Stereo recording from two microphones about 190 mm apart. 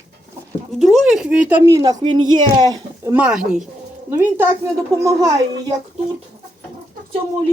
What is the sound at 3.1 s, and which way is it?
Speech, 5° right (ahead or behind).